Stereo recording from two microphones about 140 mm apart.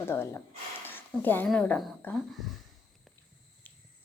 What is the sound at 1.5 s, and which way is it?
Speech, 10° left (ahead or behind).